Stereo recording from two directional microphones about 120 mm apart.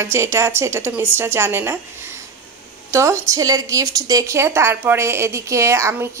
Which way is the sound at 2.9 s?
25° right (ahead or behind).